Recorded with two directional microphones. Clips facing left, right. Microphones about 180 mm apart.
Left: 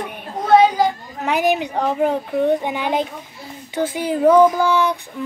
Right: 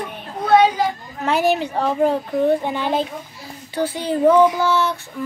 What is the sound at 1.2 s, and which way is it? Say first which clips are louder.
A child's voice: even; 15° left (ahead or behind).